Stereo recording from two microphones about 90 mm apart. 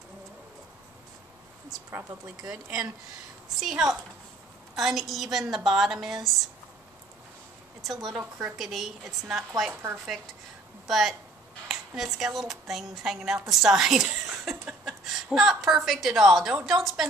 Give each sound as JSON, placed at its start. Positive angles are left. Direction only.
{"t": 1.9, "sound": "speech", "side_deg": -25}
{"t": 2.4, "sound": "speech", "side_deg": -5}
{"t": 7.8, "sound": "speech", "side_deg": 0}
{"t": 8.2, "sound": "speech", "side_deg": -15}
{"t": 8.5, "sound": "speech", "side_deg": 0}
{"t": 9.7, "sound": "speech", "side_deg": -25}
{"t": 10.9, "sound": "speech", "side_deg": 0}
{"t": 14.3, "sound": "a sound", "side_deg": -5}
{"t": 14.9, "sound": "a woman's voice", "side_deg": 0}